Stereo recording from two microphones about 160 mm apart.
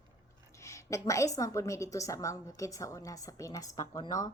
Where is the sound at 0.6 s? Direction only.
20° left (ahead or behind).